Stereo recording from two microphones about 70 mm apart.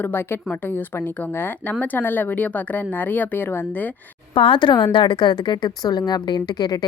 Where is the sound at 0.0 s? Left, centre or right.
Left.